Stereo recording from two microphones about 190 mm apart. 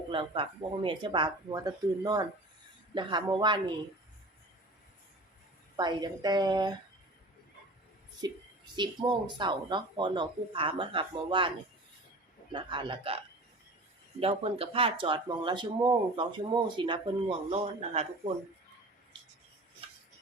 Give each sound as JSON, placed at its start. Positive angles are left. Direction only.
{"t": 0.1, "sound": "speech", "side_deg": -25}
{"t": 5.7, "sound": "speech", "side_deg": -25}
{"t": 8.2, "sound": "speech", "side_deg": -20}